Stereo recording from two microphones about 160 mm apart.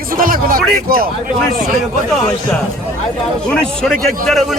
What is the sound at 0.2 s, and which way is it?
Speech, 65° right (ahead or behind).